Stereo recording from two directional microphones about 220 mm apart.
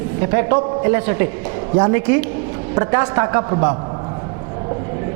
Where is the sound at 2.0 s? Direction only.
10° right (ahead or behind).